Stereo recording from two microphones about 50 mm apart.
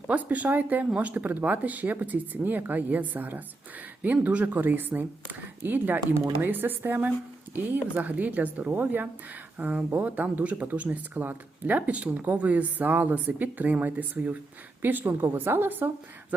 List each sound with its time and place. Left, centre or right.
0.1 s speech: right
4.4 s speech: right
15.3 s a woman's voice: right